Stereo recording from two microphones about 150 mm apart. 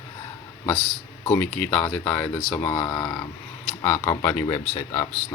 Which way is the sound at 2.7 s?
30° left (ahead or behind).